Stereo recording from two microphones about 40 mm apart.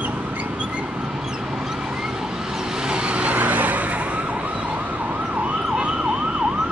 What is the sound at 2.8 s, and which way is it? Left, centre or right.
Emergency vehicle, right.